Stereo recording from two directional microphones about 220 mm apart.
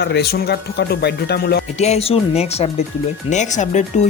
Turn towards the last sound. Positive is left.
turn(degrees=35)  # may be behind; listen again after turning